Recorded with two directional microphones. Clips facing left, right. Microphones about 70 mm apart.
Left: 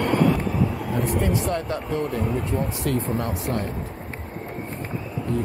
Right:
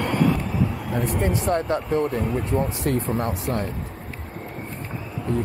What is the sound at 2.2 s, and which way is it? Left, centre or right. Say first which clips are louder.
Speech: right 1 dB; centre.